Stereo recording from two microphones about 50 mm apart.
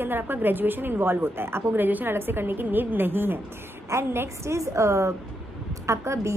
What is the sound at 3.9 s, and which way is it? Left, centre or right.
A woman's voice, right.